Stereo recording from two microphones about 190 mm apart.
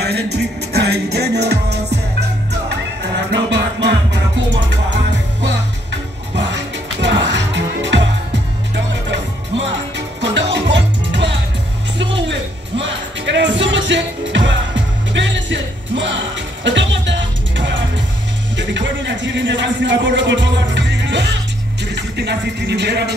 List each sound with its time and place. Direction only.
0.0 s music: 60° right (ahead or behind)
3.4 s music: 65° right (ahead or behind)
18.6 s a sound: 70° right (ahead or behind)
21.8 s music: 65° right (ahead or behind)